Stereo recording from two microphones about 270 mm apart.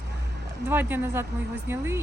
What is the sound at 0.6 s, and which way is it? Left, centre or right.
Speech, centre.